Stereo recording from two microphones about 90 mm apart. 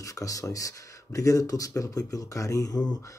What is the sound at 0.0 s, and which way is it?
Speech, 40° left (ahead or behind).